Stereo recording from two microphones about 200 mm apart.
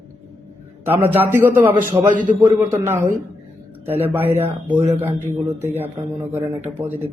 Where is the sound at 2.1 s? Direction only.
40° right (ahead or behind).